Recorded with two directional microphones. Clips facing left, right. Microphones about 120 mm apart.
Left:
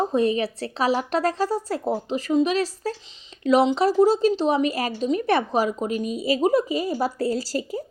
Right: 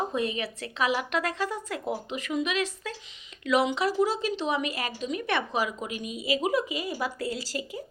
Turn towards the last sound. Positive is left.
turn(degrees=40)  # may be behind; listen again after turning